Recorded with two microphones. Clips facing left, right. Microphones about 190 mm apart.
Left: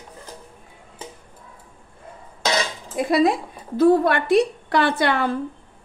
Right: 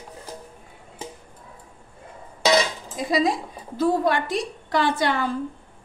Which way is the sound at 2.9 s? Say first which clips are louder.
Left 4 dB; 60° left (ahead or behind).